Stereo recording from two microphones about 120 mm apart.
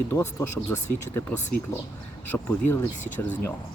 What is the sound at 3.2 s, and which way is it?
Speech, 20° left (ahead or behind).